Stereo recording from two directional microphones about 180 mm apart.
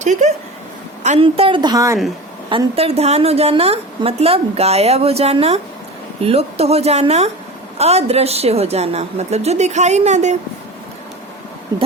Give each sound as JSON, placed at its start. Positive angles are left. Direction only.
{"t": 0.0, "sound": "a woman's voice", "side_deg": -40}
{"t": 2.5, "sound": "a woman's voice", "side_deg": -30}